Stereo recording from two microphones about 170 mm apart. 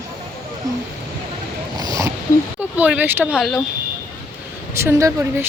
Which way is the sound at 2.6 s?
10° right (ahead or behind).